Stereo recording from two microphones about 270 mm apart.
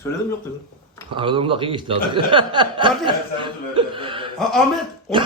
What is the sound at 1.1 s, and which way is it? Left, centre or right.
Speech, centre.